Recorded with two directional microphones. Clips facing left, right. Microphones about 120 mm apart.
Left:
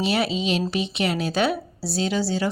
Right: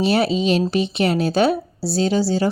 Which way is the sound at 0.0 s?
40° right (ahead or behind).